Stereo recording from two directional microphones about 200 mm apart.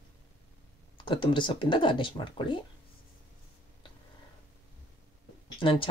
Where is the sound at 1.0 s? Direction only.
25° left (ahead or behind).